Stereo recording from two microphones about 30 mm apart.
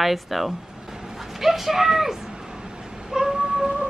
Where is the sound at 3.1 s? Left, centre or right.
Centre.